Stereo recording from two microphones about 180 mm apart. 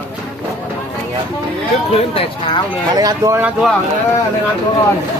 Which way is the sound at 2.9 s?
20° right (ahead or behind).